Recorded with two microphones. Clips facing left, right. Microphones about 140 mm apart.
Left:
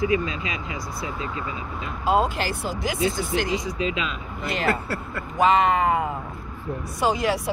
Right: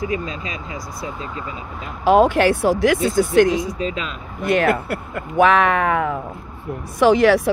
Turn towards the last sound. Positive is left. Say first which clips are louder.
# right 9 dB
turn(degrees=-75)  # may be behind; listen again after turning